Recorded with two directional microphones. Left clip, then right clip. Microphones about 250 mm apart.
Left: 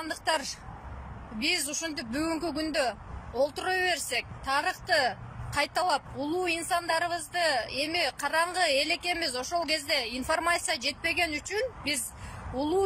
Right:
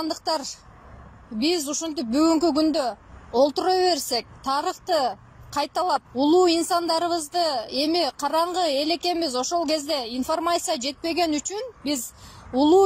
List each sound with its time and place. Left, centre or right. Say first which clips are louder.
0.0 s a woman's voice: right 4 dB; centre
7.4 s a woman's voice: right 2 dB; centre
7.7 s speech: right 6 dB; centre